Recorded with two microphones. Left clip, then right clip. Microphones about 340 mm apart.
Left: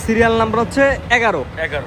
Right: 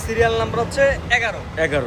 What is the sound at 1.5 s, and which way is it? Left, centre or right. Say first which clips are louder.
Speech: right 2 dB; right.